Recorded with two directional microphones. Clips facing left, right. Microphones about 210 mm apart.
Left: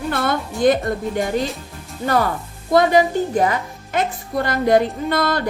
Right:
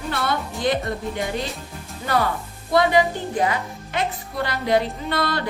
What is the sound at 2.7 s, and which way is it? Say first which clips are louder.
A woman's voice: left 4 dB; 45° left (ahead or behind).